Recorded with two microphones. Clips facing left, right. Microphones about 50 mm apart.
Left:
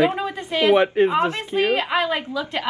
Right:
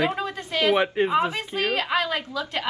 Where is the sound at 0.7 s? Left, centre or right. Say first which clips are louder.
Left 5 dB; centre.